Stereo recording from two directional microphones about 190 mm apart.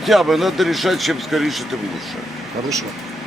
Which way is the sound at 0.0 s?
Centre (ahead or behind).